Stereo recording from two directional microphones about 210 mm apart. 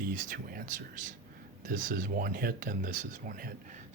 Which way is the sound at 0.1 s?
40° right (ahead or behind).